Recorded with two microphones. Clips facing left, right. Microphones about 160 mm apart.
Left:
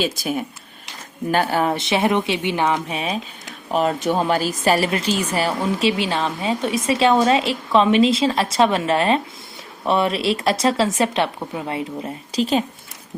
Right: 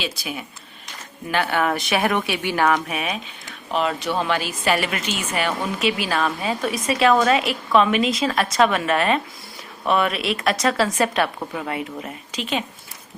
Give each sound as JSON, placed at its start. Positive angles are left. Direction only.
{"t": 0.0, "sound": "a woman's voice", "side_deg": 45}
{"t": 3.7, "sound": "speech", "side_deg": 45}
{"t": 5.8, "sound": "a woman's voice", "side_deg": 25}